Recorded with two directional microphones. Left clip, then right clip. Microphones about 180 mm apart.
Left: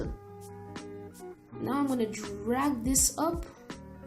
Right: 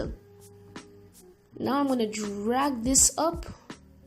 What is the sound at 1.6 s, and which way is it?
A woman's voice, 35° right (ahead or behind).